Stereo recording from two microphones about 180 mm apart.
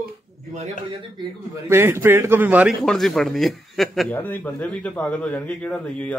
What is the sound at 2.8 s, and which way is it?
A man's voice, centre (ahead or behind).